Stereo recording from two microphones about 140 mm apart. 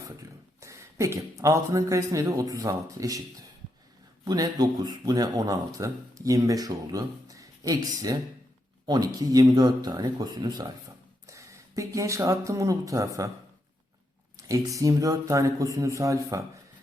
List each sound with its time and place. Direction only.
0.2 s speech: 20° right (ahead or behind)
4.3 s speech: 30° right (ahead or behind)
14.3 s speech: 25° right (ahead or behind)